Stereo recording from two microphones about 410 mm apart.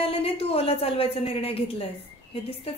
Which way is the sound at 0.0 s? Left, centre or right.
Centre.